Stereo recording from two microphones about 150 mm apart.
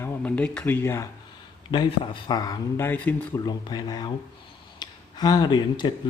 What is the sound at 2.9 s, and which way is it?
Speech, 15° left (ahead or behind).